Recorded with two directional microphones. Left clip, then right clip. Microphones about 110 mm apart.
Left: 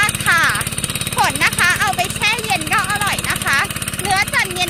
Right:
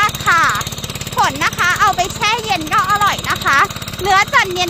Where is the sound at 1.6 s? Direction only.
35° right (ahead or behind).